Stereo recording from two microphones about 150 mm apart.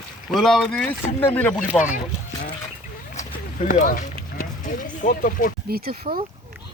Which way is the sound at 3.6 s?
60° left (ahead or behind).